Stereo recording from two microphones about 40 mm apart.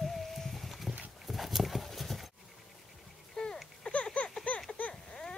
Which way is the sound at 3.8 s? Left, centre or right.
Left.